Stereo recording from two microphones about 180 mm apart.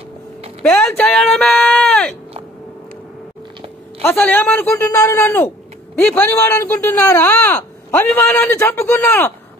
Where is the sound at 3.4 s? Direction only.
25° right (ahead or behind).